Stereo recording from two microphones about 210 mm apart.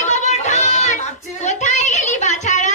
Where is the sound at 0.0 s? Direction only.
35° left (ahead or behind).